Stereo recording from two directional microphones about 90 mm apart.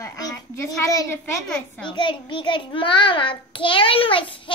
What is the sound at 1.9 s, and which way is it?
A child's voice, 60° left (ahead or behind).